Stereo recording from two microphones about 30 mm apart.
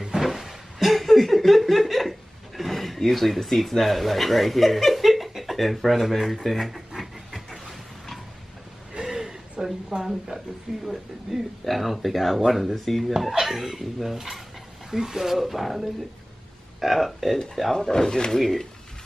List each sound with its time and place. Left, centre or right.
0.2 s a sound: centre
5.9 s speech: centre
7.0 s a sound: centre
9.0 s a sound: centre
10.7 s speech: centre
11.6 s speech: centre
13.3 s speech: centre
15.3 s speech: centre
17.7 s speech: left
18.4 s speech: centre